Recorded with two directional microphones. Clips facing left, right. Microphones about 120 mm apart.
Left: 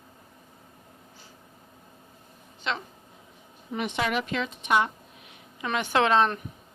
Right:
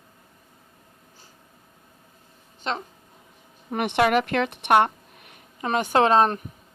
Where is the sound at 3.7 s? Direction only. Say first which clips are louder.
Right 7 dB; 60° right (ahead or behind); by 6.4 s 40° right (ahead or behind).